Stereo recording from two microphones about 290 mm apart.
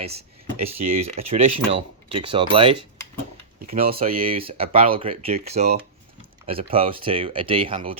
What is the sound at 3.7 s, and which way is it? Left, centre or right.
Speech, right.